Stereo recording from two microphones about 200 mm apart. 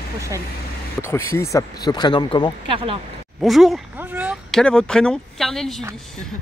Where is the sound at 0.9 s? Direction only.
10° left (ahead or behind).